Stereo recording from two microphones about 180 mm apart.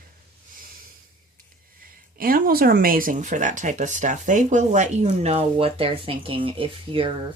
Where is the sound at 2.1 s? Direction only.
55° right (ahead or behind); by 7.1 s 30° right (ahead or behind).